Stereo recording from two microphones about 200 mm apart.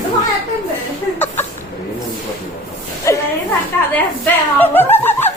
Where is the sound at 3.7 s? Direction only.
10° left (ahead or behind).